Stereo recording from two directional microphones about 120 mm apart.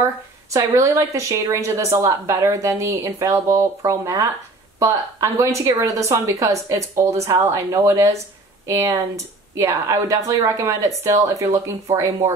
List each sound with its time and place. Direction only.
0.0 s speech: 25° right (ahead or behind)